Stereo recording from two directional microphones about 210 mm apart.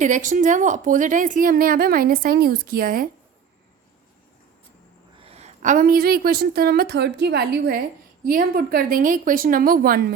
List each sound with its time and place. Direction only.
0.0 s a woman's voice: 35° right (ahead or behind)
5.2 s a woman's voice: 30° right (ahead or behind); by 10.2 s 45° right (ahead or behind)